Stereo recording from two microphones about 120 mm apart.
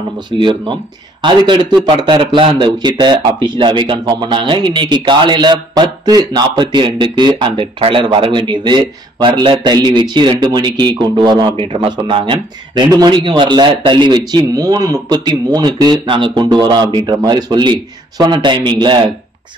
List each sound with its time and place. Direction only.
0.3 s a man's voice: 40° right (ahead or behind)